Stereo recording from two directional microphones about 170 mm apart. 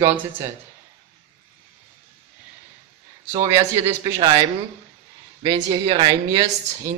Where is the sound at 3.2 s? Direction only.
20° right (ahead or behind).